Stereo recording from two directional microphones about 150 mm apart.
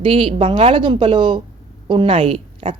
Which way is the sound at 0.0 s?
35° right (ahead or behind).